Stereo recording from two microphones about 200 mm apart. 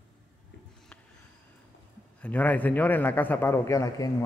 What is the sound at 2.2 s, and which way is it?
A man's voice, 5° left (ahead or behind).